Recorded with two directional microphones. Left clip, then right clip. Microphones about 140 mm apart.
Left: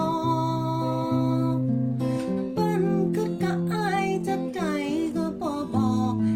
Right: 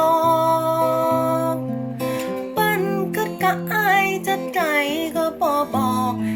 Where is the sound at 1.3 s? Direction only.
15° left (ahead or behind).